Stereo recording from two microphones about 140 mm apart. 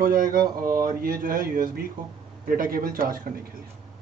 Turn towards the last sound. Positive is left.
turn(degrees=-90)